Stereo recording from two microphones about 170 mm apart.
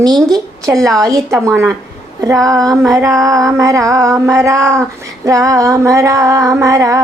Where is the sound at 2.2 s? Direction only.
20° right (ahead or behind).